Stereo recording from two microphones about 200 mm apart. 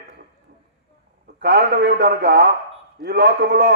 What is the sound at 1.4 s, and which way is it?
A man's voice, 50° right (ahead or behind).